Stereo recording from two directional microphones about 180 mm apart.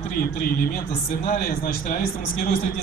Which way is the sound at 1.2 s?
45° left (ahead or behind).